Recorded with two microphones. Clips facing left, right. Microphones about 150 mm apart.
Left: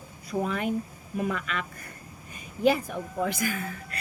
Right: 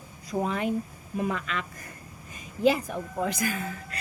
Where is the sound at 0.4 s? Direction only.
30° right (ahead or behind).